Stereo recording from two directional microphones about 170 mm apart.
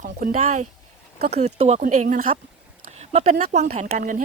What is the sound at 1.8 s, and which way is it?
Speech, 50° right (ahead or behind).